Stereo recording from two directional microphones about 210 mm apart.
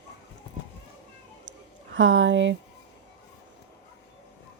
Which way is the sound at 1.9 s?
65° right (ahead or behind).